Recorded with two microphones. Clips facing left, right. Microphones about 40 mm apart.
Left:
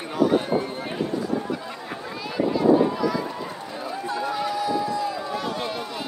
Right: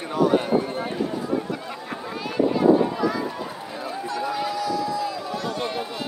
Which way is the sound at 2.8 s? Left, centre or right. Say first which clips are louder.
Left 1 dB; centre.